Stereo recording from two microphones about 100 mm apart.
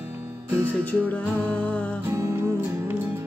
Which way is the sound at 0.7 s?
15° left (ahead or behind).